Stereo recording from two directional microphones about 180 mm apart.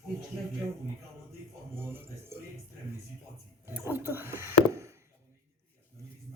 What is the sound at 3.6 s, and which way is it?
A woman's voice, 10° right (ahead or behind).